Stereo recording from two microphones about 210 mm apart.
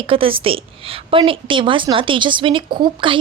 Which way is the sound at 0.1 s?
25° right (ahead or behind).